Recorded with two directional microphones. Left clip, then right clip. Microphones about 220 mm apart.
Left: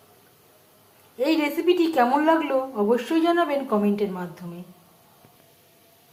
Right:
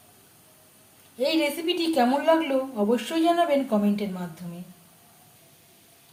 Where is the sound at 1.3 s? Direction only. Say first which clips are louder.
Left 4 dB; 5° left (ahead or behind).